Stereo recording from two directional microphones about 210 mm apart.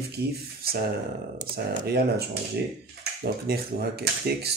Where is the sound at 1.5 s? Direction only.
50° right (ahead or behind).